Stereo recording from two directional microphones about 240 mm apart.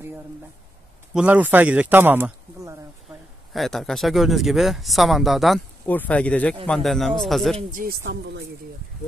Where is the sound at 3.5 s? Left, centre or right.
Centre.